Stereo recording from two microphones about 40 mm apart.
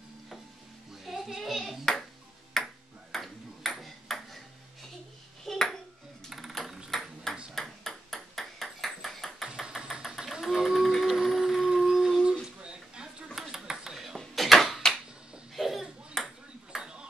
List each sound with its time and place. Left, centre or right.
1.0 s a child's voice: centre
2.5 s ping: centre
5.4 s ping: centre
6.9 s ping: centre
9.6 s hammer: centre
10.0 s a sound: centre
12.6 s a sound: right
13.3 s ping: centre
14.1 s a sound: centre
16.2 s ping: centre
16.7 s ping: centre